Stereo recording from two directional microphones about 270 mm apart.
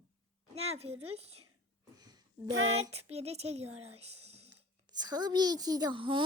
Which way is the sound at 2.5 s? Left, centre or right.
Right.